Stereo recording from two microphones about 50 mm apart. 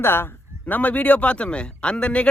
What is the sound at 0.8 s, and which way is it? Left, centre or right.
Speech, left.